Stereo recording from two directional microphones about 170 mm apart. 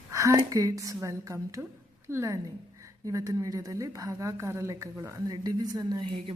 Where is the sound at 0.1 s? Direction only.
20° right (ahead or behind).